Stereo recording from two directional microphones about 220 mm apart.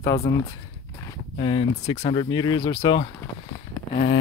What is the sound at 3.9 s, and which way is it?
Speech, 35° left (ahead or behind).